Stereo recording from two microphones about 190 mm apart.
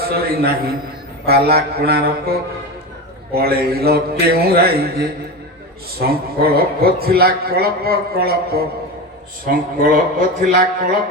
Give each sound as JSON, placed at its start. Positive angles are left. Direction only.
{"t": 0.0, "sound": "a man's voice", "side_deg": -55}
{"t": 3.3, "sound": "a man's voice", "side_deg": -55}